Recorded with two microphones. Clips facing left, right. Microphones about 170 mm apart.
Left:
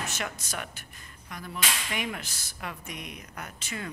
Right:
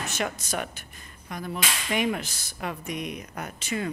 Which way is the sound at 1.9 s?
25° right (ahead or behind).